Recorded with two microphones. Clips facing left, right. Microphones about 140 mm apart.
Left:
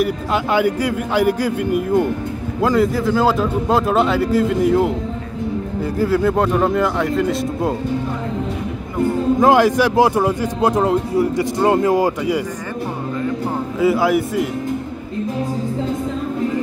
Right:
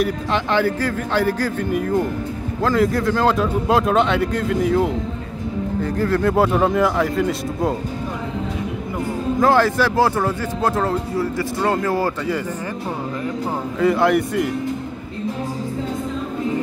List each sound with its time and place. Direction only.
0.0 s a man's voice: 5° left (ahead or behind)
6.3 s a man's voice: 5° right (ahead or behind)
9.4 s speech: 15° left (ahead or behind)
13.7 s a man's voice: 5° left (ahead or behind)